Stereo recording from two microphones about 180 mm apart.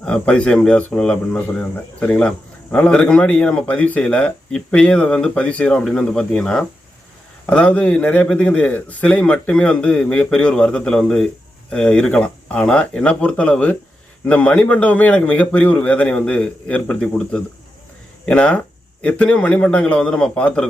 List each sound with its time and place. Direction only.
0.0 s a man's voice: 5° left (ahead or behind)